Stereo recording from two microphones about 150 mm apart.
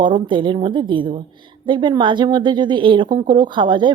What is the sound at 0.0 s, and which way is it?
Speech, 30° right (ahead or behind).